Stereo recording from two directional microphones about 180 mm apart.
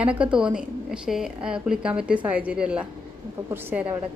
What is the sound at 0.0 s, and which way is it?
A woman's voice, 5° right (ahead or behind).